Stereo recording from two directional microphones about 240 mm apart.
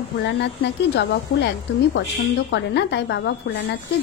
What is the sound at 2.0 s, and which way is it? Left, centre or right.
A woman's voice, left.